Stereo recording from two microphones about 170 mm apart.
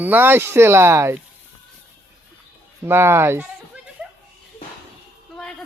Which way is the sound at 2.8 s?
15° right (ahead or behind).